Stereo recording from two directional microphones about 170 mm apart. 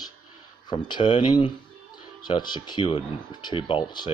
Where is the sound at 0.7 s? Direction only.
25° left (ahead or behind).